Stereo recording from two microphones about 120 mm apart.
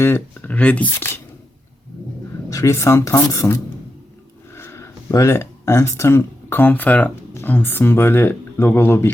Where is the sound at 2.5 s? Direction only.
25° left (ahead or behind).